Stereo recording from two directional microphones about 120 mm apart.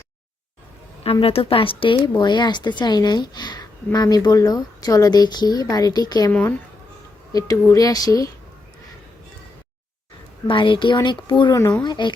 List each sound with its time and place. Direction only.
1.2 s speech: 50° left (ahead or behind); by 6.3 s 35° left (ahead or behind)
7.3 s speech: 25° left (ahead or behind)
10.4 s a woman's voice: 45° left (ahead or behind)